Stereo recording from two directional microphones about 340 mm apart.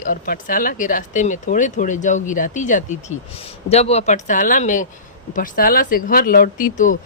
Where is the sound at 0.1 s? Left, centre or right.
Left.